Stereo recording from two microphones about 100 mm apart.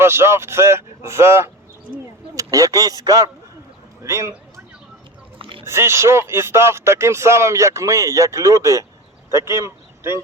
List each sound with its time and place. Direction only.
0.0 s speech: 25° right (ahead or behind)
5.4 s a sound: 60° right (ahead or behind)
5.6 s speech: 25° right (ahead or behind)